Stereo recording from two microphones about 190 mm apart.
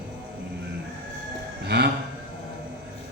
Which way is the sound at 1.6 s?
60° right (ahead or behind).